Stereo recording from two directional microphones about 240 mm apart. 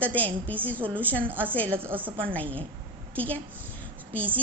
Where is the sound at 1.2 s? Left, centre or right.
Centre.